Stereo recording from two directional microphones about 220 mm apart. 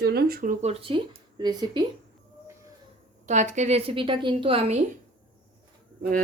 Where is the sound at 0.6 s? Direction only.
25° right (ahead or behind).